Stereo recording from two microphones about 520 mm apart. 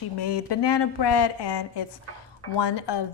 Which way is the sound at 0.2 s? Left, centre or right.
Left.